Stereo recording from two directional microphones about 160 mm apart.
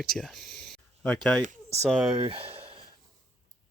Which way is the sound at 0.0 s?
5° left (ahead or behind).